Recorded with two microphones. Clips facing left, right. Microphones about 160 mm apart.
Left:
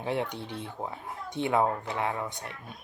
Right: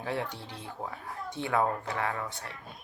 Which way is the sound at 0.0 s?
20° left (ahead or behind).